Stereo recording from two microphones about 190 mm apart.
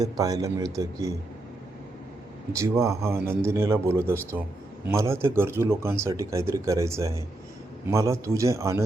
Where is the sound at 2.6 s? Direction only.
15° right (ahead or behind).